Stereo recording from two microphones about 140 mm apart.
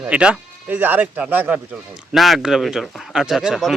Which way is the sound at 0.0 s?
10° right (ahead or behind).